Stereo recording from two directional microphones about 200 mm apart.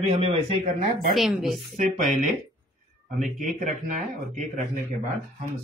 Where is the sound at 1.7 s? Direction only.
40° right (ahead or behind).